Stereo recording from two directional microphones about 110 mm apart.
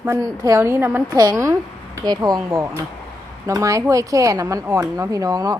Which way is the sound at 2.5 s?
25° right (ahead or behind).